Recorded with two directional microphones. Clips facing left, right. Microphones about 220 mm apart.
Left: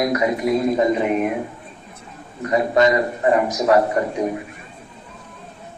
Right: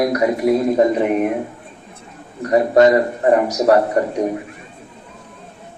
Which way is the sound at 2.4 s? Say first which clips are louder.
Right 4 dB; 40° right (ahead or behind).